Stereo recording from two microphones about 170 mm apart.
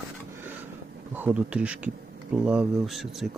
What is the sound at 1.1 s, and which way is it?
Speech, 10° right (ahead or behind).